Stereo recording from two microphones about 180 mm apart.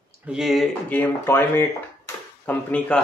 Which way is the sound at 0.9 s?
10° left (ahead or behind).